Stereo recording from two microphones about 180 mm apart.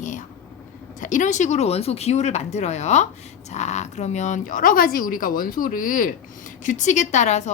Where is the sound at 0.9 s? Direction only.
45° left (ahead or behind).